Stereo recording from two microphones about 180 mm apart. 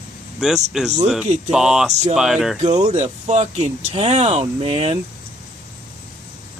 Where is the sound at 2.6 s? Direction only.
40° right (ahead or behind).